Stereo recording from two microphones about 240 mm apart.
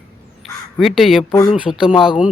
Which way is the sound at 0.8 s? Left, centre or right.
Centre.